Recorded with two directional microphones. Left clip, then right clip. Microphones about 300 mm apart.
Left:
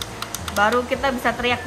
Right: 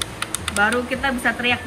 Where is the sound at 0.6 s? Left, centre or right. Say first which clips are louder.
Left 1 dB; centre.